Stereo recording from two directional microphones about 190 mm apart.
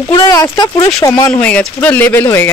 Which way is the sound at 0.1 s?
25° left (ahead or behind).